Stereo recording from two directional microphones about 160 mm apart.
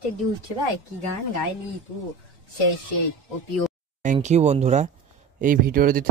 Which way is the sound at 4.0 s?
50° right (ahead or behind).